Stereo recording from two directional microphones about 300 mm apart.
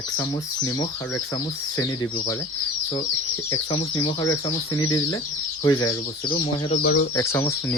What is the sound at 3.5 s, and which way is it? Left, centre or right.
Speech, centre.